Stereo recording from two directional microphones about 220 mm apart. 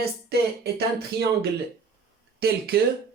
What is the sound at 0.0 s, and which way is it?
Speech, 45° right (ahead or behind).